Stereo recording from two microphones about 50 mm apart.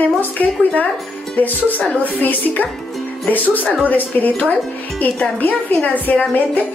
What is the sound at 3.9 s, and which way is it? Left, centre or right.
A woman's voice, left.